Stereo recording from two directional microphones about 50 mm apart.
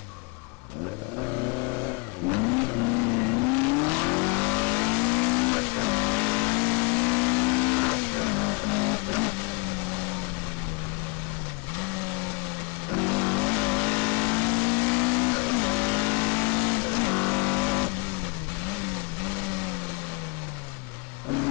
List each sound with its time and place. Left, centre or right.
1.9 s vehicle: left
11.8 s blender: left
12.9 s vehicle: left